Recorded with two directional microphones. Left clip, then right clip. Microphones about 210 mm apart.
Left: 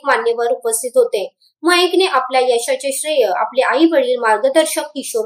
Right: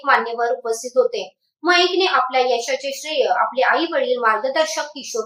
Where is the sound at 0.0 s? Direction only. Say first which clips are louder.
Left 2 dB; 45° left (ahead or behind).